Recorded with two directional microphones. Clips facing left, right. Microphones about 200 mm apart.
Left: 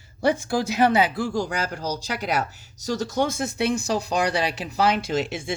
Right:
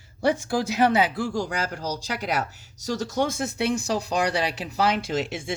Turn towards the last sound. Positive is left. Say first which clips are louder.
# left 2 dB
turn(degrees=10)  # may be behind; listen again after turning